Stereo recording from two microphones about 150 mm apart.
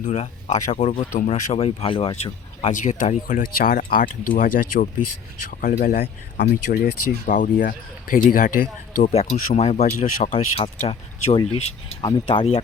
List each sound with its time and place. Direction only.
0.0 s speech: 50° left (ahead or behind)
2.7 s speech: 60° left (ahead or behind)
9.1 s speech: 45° left (ahead or behind)
10.3 s speech: 40° left (ahead or behind)